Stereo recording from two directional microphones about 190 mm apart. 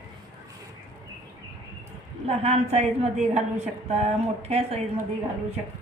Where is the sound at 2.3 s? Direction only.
35° right (ahead or behind).